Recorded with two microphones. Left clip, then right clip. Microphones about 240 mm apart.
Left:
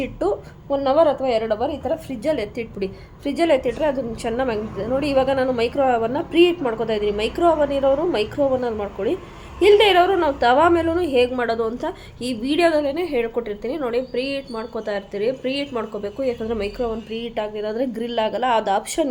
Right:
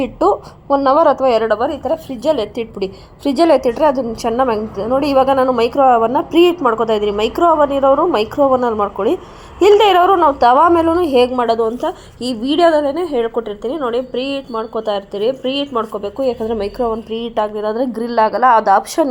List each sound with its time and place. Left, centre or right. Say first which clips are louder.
0.0 s a woman's voice: right 8 dB; right